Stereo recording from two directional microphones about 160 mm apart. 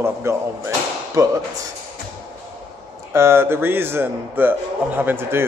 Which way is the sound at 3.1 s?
15° right (ahead or behind).